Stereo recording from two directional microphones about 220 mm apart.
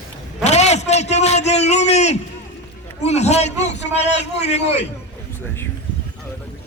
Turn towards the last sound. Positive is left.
turn(degrees=30)  # may be behind; listen again after turning